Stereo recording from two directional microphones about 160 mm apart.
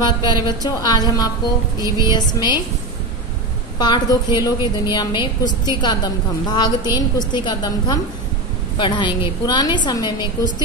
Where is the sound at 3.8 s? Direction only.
25° left (ahead or behind).